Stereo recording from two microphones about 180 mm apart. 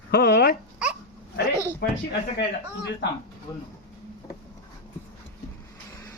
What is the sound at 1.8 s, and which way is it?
Speech, 65° left (ahead or behind).